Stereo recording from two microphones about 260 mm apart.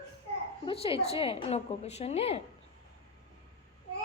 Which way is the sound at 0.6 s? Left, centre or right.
Left.